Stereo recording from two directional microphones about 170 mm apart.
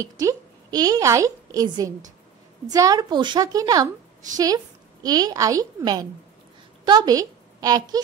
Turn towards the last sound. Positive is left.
turn(degrees=-20)  # may be behind; listen again after turning